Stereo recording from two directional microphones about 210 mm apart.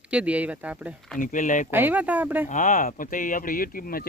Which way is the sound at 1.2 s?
40° left (ahead or behind).